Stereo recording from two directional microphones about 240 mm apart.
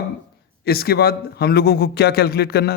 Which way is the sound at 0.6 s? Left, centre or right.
Left.